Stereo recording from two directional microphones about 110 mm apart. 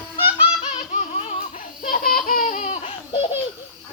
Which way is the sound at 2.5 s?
85° left.